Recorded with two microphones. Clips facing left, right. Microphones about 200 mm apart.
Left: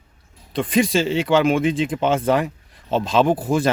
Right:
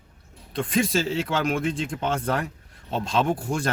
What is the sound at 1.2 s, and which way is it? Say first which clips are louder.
Speech: left 8 dB; 90° left.